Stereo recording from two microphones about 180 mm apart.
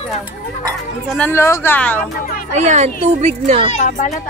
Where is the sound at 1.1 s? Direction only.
10° left (ahead or behind).